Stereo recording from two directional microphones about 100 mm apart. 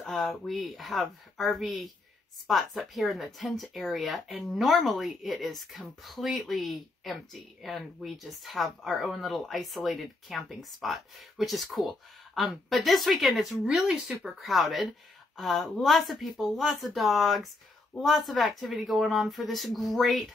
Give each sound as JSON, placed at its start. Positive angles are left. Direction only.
{"t": 0.0, "sound": "speech", "side_deg": 5}